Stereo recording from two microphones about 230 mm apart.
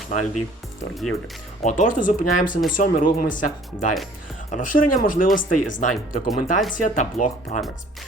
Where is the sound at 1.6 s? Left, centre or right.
Left.